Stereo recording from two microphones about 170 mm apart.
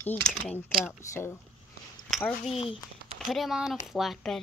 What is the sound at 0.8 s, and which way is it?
Speech, 15° left (ahead or behind).